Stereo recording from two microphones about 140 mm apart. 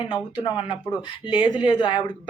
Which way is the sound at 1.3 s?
35° left (ahead or behind).